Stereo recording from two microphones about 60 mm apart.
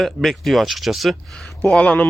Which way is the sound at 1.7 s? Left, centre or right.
Left.